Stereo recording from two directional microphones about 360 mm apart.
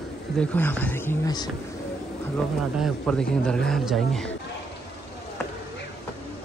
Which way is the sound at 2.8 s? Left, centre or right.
Centre.